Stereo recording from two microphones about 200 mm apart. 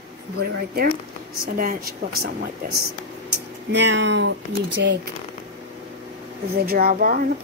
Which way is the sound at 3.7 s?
60° right (ahead or behind).